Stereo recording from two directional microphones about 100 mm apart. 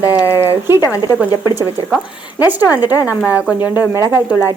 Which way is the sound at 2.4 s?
35° left (ahead or behind).